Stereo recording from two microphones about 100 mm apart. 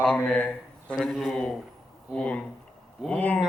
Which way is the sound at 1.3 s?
5° left (ahead or behind).